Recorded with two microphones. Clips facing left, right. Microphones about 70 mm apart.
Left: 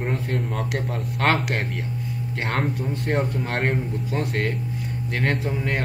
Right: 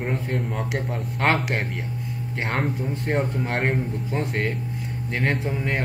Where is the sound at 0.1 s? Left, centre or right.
Centre.